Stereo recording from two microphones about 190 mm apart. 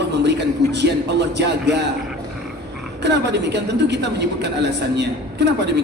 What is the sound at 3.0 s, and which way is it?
A man's voice, 65° right (ahead or behind).